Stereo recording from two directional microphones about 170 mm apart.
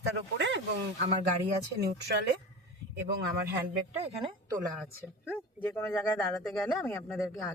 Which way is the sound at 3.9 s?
40° right (ahead or behind).